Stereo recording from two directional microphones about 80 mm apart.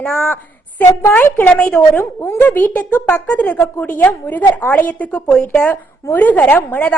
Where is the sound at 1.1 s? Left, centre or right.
Left.